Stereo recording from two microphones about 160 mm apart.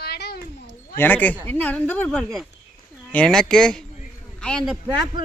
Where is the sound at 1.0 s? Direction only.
10° left (ahead or behind).